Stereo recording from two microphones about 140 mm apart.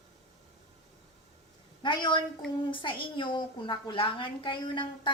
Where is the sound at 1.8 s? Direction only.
35° left (ahead or behind).